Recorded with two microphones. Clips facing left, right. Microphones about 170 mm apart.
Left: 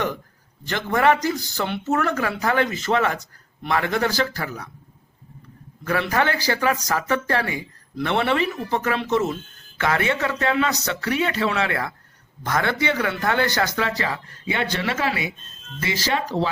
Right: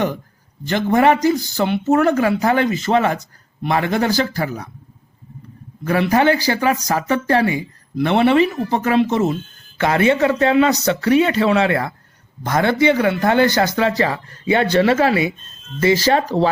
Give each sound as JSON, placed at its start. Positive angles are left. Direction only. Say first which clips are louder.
{"t": 0.7, "sound": "speech", "louder": "right 5 dB", "side_deg": -20}
{"t": 5.8, "sound": "speech", "louder": "right 7 dB", "side_deg": -20}